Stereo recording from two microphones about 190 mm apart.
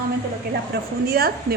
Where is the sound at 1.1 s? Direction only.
55° right (ahead or behind).